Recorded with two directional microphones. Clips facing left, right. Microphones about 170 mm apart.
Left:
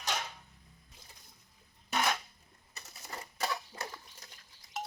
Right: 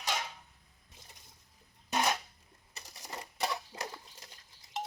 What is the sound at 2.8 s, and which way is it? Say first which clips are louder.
Typewriter: right 1 dB; 15° right (ahead or behind).